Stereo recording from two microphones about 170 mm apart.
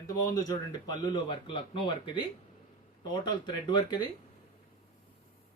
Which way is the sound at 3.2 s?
25° left (ahead or behind).